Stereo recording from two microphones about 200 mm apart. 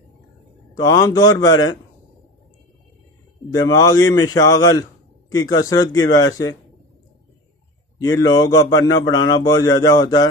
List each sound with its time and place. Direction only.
0.7 s a man's voice: 20° left (ahead or behind)
3.5 s a man's voice: 20° left (ahead or behind)
8.0 s a man's voice: 20° left (ahead or behind)